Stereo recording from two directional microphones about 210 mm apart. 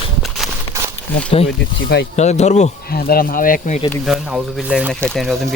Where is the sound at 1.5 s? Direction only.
55° left (ahead or behind).